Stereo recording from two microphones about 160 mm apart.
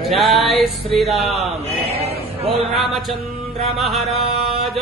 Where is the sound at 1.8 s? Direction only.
40° right (ahead or behind).